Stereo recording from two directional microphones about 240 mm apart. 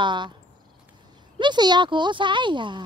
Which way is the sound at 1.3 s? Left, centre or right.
Centre.